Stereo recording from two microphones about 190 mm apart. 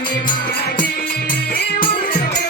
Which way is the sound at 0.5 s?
50° left (ahead or behind).